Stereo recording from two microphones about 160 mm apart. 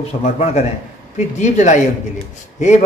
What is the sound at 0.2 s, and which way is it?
A man's voice, 45° left (ahead or behind).